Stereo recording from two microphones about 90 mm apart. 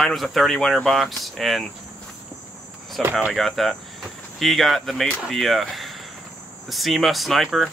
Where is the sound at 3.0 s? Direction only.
Centre (ahead or behind).